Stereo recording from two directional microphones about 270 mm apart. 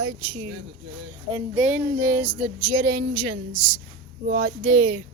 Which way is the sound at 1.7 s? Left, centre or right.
Centre.